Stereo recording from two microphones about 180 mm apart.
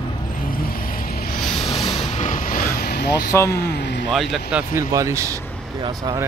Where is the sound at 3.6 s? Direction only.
65° left (ahead or behind).